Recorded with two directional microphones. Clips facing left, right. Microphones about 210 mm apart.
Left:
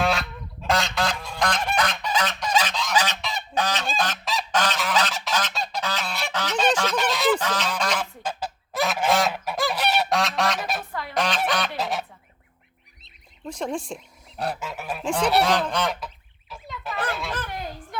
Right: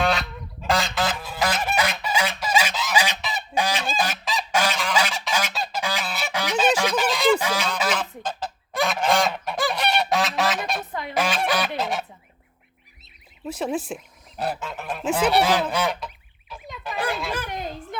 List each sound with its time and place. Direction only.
0.0 s goose: centre (ahead or behind)
7.3 s goose: 10° right (ahead or behind)
7.9 s goose: 10° left (ahead or behind)
15.0 s goose: 5° right (ahead or behind)
17.1 s baby laughter: centre (ahead or behind)
17.3 s a sound: 15° right (ahead or behind)